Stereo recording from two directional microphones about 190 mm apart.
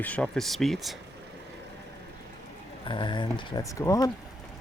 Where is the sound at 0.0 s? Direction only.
5° left (ahead or behind).